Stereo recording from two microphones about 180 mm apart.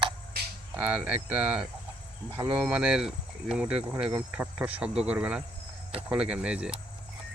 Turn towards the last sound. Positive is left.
turn(degrees=-5)  # may be behind; listen again after turning